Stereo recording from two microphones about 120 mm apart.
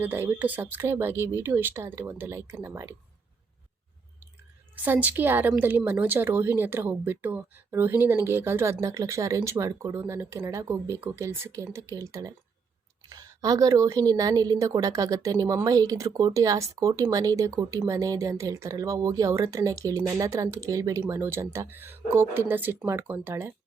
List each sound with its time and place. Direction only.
0.0 s a woman's voice: 15° right (ahead or behind)
4.7 s a woman's voice: 15° right (ahead or behind)